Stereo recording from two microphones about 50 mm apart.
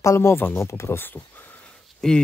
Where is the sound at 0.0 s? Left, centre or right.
Left.